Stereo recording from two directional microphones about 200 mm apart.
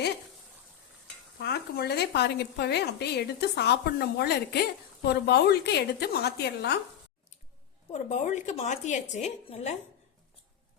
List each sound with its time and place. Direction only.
1.4 s a woman's voice: 55° left (ahead or behind)
7.9 s a woman's voice: 35° left (ahead or behind)